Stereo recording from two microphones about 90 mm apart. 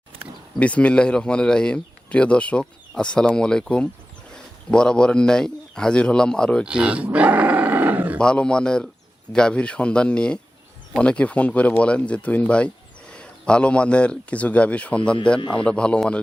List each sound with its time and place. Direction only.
0.6 s a man's voice: 15° left (ahead or behind)
6.7 s roar: 10° right (ahead or behind)
8.2 s speech: 10° left (ahead or behind)